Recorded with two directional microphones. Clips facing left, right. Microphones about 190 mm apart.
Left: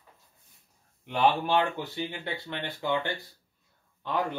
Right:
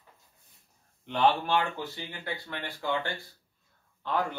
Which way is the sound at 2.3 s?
25° left (ahead or behind).